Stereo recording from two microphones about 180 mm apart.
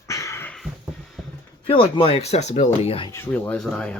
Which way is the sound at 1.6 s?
30° left (ahead or behind).